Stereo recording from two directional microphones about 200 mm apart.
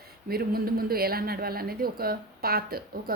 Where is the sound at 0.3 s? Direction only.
50° right (ahead or behind).